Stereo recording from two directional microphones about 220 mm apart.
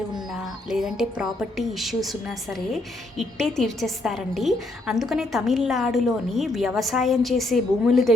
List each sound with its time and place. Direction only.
0.3 s speech: centre (ahead or behind)